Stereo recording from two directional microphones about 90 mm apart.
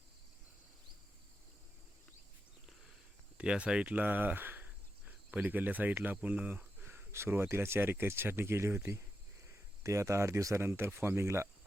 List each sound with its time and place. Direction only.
3.3 s speech: 10° right (ahead or behind)
6.8 s speech: 30° right (ahead or behind)